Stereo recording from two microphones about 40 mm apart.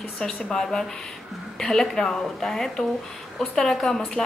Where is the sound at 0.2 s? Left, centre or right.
Left.